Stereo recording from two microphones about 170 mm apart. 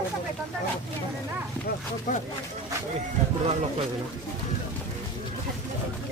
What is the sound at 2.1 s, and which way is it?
Speech, 50° left (ahead or behind).